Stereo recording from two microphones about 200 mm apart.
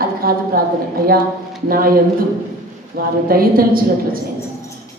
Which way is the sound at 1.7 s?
45° right (ahead or behind).